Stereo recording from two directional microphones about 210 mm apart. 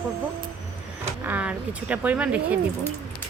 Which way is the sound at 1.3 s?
5° right (ahead or behind).